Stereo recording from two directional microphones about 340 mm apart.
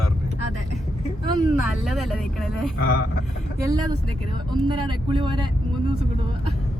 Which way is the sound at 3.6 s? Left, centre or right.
Centre.